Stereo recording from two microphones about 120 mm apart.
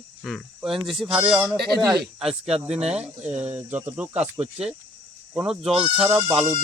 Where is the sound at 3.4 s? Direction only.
15° right (ahead or behind).